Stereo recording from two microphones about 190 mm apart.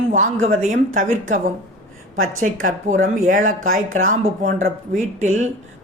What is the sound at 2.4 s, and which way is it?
Speech, 40° right (ahead or behind).